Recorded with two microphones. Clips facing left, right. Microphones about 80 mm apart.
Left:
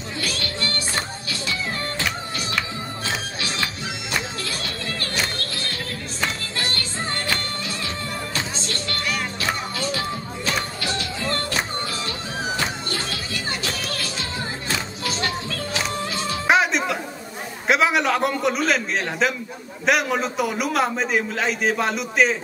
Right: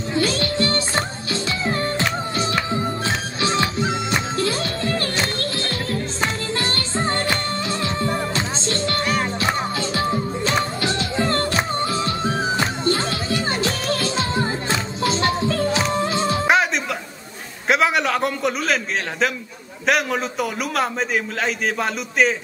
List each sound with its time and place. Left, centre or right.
0.1 s music: right
16.4 s music: centre
17.6 s a sound: centre
19.9 s a man's voice: centre